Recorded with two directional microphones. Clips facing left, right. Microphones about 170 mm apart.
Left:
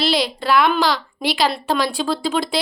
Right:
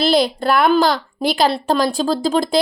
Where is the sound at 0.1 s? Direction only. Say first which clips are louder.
Right 3 dB; 50° right (ahead or behind).